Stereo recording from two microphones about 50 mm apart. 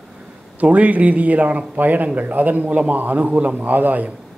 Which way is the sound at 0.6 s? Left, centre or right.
Right.